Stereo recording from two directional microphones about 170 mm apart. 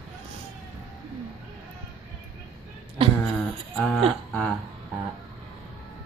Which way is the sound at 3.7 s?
Centre (ahead or behind).